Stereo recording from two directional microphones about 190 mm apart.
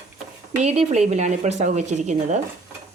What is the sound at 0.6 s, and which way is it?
Speech, 35° right (ahead or behind).